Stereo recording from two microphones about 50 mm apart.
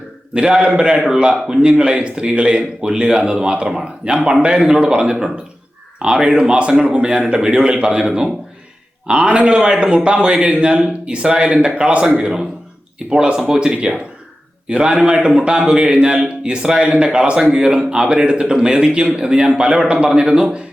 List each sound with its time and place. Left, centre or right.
0.3 s a man's voice: centre
0.9 s a man's voice: centre